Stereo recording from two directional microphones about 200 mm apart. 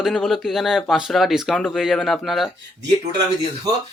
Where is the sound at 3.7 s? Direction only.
15° right (ahead or behind).